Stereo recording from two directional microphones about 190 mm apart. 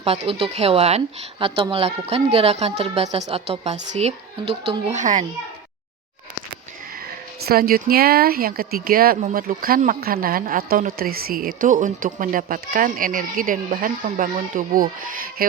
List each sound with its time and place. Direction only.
0.0 s speech: 30° right (ahead or behind)
7.4 s speech: 50° right (ahead or behind)